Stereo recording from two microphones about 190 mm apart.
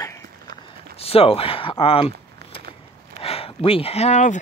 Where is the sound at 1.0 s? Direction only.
30° left (ahead or behind).